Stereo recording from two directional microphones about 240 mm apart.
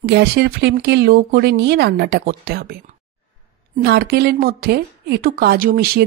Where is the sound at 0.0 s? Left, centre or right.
Right.